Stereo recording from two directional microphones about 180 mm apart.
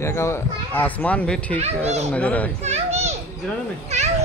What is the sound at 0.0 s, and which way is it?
Speech, 15° left (ahead or behind).